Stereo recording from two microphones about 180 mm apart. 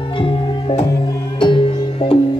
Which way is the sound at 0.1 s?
30° left (ahead or behind).